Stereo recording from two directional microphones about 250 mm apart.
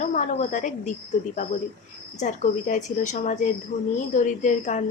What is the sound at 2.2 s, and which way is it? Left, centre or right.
A woman's voice, left.